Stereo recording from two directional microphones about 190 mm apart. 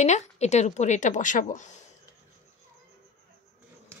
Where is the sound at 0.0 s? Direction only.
35° left (ahead or behind).